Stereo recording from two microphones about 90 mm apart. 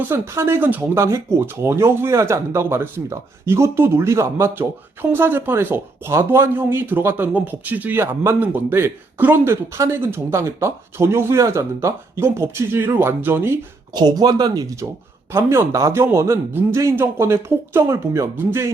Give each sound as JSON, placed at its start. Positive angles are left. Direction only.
{"t": 0.1, "sound": "speech", "side_deg": -25}
{"t": 8.0, "sound": "speech", "side_deg": -30}
{"t": 13.9, "sound": "speech", "side_deg": -50}
{"t": 15.3, "sound": "speech", "side_deg": -30}